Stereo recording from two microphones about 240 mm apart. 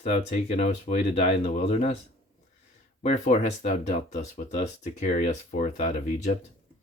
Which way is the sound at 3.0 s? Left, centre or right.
Left.